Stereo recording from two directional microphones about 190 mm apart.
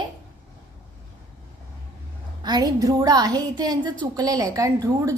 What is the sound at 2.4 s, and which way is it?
A woman's voice, 20° right (ahead or behind).